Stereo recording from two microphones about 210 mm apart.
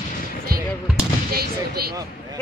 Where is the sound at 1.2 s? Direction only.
45° right (ahead or behind).